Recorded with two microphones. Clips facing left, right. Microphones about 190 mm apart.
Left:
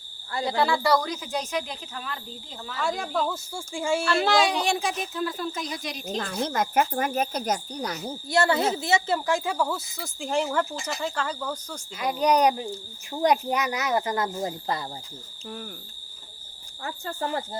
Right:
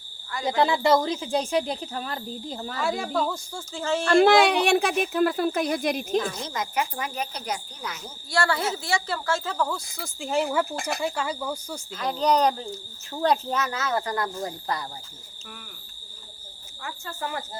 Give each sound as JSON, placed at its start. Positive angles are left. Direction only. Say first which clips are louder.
{"t": 0.4, "sound": "speech", "louder": "right 2 dB", "side_deg": -20}
{"t": 2.8, "sound": "speech", "louder": "right 1 dB", "side_deg": -5}
{"t": 4.0, "sound": "speech", "louder": "right 7 dB", "side_deg": -50}
{"t": 6.3, "sound": "cricket", "louder": "left 5 dB", "side_deg": 55}
{"t": 8.3, "sound": "speech", "louder": "left 3 dB", "side_deg": 20}
{"t": 10.8, "sound": "speech", "louder": "right 3 dB", "side_deg": -60}
{"t": 11.0, "sound": "cricket", "louder": "even", "side_deg": -10}
{"t": 11.9, "sound": "speech", "louder": "left 1 dB", "side_deg": 10}
{"t": 16.8, "sound": "speech", "louder": "left 3 dB", "side_deg": 35}